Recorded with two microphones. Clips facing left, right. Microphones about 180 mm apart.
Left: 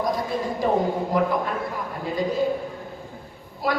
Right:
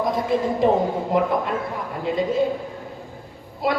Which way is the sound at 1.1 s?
25° right (ahead or behind).